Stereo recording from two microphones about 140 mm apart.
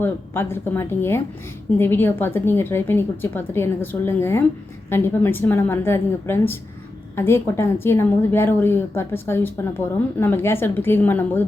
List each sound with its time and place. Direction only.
0.0 s a woman's voice: 15° left (ahead or behind)